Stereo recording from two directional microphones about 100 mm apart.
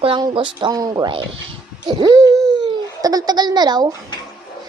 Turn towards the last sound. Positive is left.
turn(degrees=-45)  # may be behind; listen again after turning